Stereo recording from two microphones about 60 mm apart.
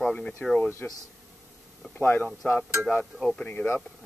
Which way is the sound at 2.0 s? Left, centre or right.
Left.